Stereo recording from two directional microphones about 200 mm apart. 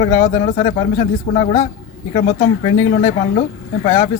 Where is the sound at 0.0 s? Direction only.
40° left (ahead or behind).